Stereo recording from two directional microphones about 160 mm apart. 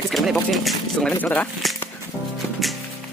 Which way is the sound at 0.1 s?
Centre (ahead or behind).